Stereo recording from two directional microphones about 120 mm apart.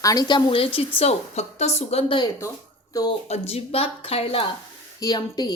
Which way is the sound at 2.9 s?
30° left (ahead or behind).